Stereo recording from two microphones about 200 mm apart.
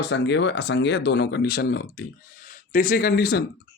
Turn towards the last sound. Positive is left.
turn(degrees=50)  # may be behind; listen again after turning